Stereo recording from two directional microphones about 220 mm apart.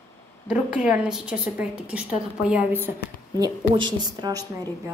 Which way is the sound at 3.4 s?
20° right (ahead or behind).